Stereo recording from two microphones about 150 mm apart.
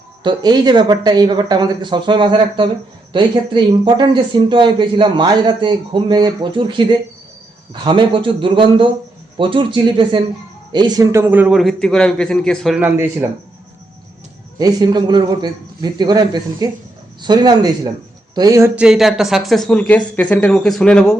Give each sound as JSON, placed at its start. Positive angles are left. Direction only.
{"t": 0.2, "sound": "a man's voice", "side_deg": -30}
{"t": 12.8, "sound": "speech", "side_deg": -10}
{"t": 14.6, "sound": "speech", "side_deg": -25}
{"t": 18.8, "sound": "a man's voice", "side_deg": -5}